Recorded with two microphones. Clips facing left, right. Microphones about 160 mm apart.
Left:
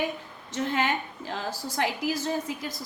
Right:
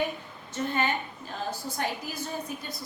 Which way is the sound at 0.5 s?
90° left.